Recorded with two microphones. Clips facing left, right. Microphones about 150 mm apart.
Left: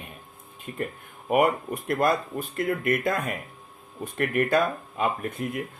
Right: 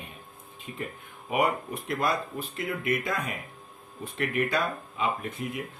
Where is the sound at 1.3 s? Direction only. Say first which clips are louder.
Left 5 dB; 50° left (ahead or behind).